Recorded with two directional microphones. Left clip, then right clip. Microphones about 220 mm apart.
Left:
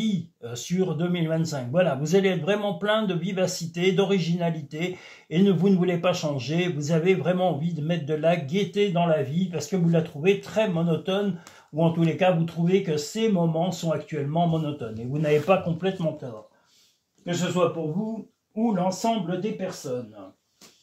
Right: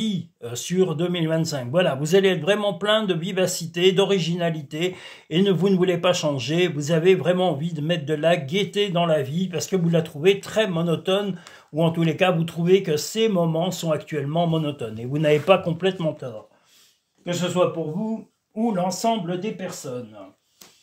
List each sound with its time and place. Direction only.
0.0 s speech: 45° right (ahead or behind)
17.2 s speech: 45° right (ahead or behind)